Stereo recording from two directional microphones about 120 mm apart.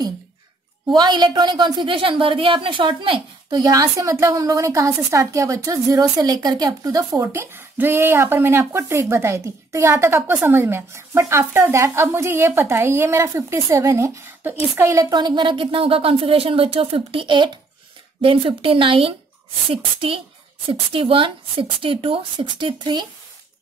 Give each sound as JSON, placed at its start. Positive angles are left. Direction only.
{"t": 0.8, "sound": "a woman's voice", "side_deg": -40}
{"t": 15.0, "sound": "speech", "side_deg": -35}